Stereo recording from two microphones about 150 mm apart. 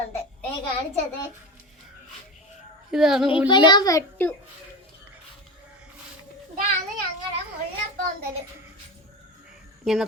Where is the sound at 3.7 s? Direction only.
25° left (ahead or behind).